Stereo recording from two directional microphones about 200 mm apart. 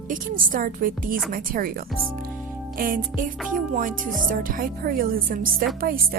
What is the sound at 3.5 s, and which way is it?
Speech, 40° right (ahead or behind).